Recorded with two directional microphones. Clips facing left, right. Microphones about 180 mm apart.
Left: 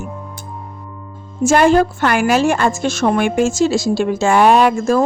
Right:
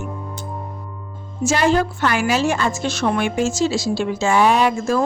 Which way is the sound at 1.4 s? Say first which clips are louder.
Left 6 dB; 50° left (ahead or behind).